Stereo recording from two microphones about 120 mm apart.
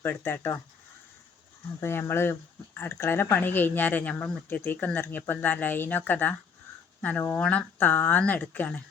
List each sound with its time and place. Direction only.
0.0 s speech: 15° left (ahead or behind)
1.8 s speech: 20° left (ahead or behind)